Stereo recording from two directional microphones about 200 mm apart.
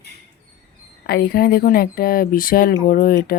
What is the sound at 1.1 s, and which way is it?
Speech, 50° left (ahead or behind).